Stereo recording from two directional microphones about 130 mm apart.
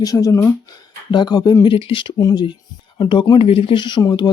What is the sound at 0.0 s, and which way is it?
Speech, 25° left (ahead or behind).